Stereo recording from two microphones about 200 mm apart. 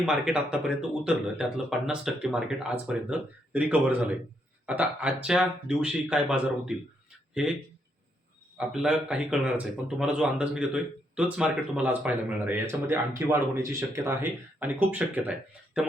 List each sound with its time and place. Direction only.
0.0 s a man's voice: 5° right (ahead or behind)